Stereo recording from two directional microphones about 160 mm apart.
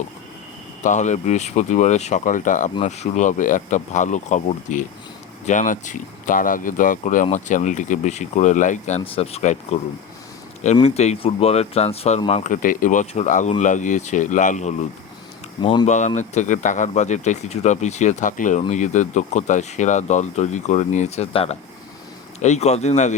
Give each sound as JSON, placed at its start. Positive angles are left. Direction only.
{"t": 0.8, "sound": "speech", "side_deg": 50}
{"t": 9.1, "sound": "speech", "side_deg": 40}
{"t": 10.8, "sound": "speech", "side_deg": 45}
{"t": 15.6, "sound": "speech", "side_deg": 30}
{"t": 15.9, "sound": "speech", "side_deg": 45}